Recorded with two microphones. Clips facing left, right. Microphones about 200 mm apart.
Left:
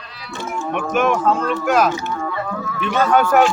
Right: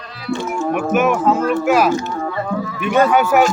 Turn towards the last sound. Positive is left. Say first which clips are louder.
# right 2 dB
turn(degrees=-10)  # may be behind; listen again after turning